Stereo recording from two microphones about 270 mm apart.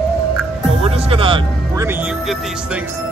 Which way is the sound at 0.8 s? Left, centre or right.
Right.